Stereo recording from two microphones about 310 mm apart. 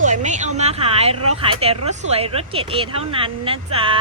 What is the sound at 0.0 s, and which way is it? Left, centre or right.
A woman's voice, right.